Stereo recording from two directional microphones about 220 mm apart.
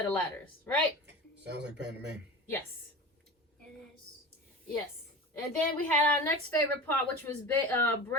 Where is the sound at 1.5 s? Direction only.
50° right (ahead or behind).